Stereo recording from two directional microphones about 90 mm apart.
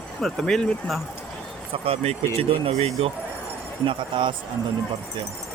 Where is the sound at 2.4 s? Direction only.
90° right.